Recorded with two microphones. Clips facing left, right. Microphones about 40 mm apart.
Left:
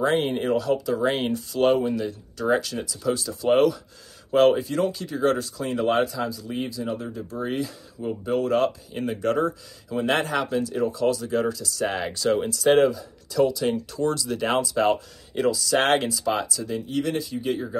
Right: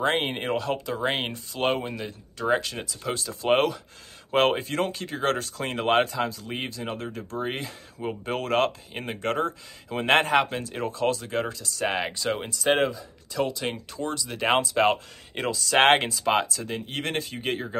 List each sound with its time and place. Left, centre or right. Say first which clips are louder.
0.0 s speech: left 3 dB; right
7.4 s speech: left 6 dB; right
8.0 s speech: left 5 dB; right
11.8 s speech: left 2 dB; right
14.5 s speech: right 1 dB; right